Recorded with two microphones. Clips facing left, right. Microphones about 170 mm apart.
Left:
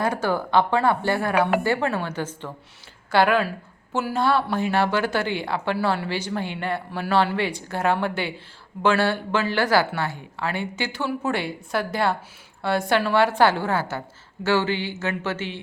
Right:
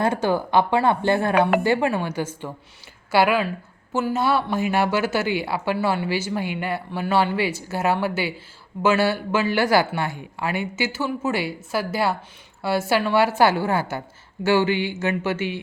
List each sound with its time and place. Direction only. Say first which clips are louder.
0.0 s a woman's voice: right 2 dB; 20° right (ahead or behind)